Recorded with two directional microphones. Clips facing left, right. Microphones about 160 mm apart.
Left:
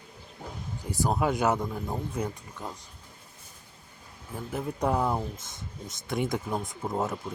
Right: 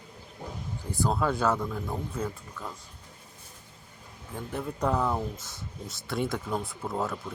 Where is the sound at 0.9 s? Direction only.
15° left (ahead or behind).